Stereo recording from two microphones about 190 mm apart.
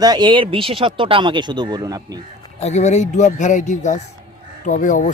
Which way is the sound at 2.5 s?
35° left (ahead or behind).